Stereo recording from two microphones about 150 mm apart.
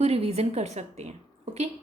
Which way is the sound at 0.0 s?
45° right (ahead or behind).